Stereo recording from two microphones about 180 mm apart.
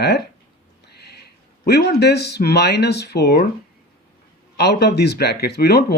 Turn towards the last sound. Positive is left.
turn(degrees=60)  # may be behind; listen again after turning